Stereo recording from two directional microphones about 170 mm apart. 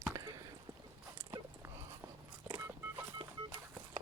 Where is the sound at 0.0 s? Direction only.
20° right (ahead or behind).